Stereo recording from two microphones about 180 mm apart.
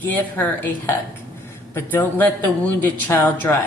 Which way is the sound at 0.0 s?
10° left (ahead or behind).